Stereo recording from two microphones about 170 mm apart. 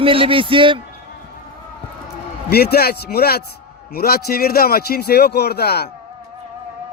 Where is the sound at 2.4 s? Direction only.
70° left (ahead or behind).